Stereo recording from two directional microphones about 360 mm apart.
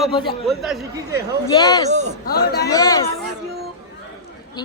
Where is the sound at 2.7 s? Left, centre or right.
Centre.